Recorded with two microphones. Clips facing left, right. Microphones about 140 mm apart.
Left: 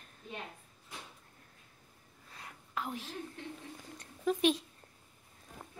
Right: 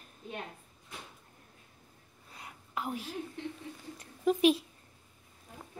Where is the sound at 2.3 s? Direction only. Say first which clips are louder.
Right 1 dB; 10° right (ahead or behind).